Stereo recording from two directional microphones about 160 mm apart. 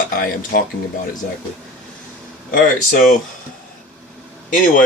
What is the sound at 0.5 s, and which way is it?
Speech, 65° left (ahead or behind).